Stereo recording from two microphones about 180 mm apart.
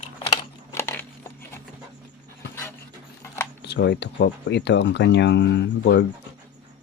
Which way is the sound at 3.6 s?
75° left (ahead or behind).